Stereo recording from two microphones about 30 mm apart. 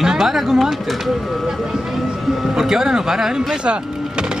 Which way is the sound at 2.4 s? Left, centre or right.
Centre.